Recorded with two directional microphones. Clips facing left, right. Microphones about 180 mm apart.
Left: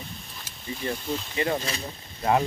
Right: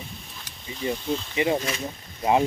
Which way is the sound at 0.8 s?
15° right (ahead or behind).